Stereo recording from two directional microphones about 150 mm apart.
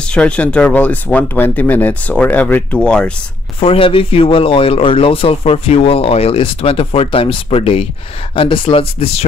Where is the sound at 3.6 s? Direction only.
35° left (ahead or behind).